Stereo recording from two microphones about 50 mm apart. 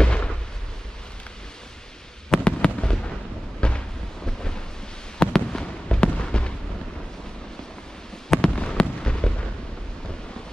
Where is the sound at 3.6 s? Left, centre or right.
Centre.